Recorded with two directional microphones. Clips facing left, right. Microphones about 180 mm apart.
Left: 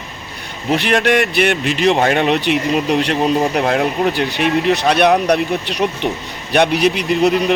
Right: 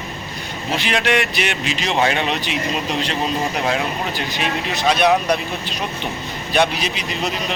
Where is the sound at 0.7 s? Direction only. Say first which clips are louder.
Left 5 dB; 60° left (ahead or behind).